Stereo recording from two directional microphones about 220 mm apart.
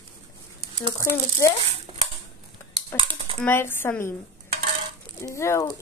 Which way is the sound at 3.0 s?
25° right (ahead or behind).